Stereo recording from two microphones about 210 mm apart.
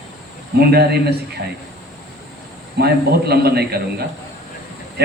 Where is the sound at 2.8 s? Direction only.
50° right (ahead or behind).